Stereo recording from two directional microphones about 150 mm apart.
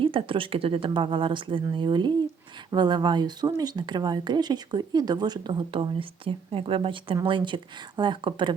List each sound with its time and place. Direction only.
0.0 s speech: 35° right (ahead or behind)